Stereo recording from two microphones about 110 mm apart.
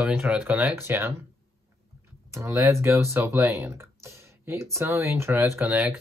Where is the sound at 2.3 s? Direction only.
25° right (ahead or behind).